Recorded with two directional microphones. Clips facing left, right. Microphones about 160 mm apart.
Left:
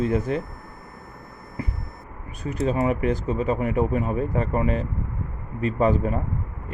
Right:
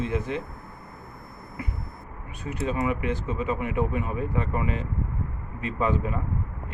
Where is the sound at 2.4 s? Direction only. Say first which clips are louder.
Left 4 dB; 35° left (ahead or behind).